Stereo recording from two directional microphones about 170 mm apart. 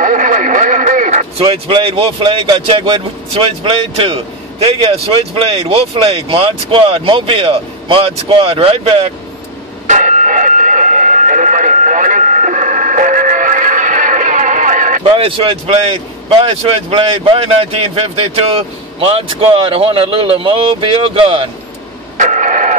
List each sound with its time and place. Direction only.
0.0 s radio: 50° right (ahead or behind)
1.4 s a man's voice: 30° right (ahead or behind)
9.8 s radio: 45° right (ahead or behind)
15.0 s a man's voice: 30° right (ahead or behind)
22.1 s a sound: 50° right (ahead or behind)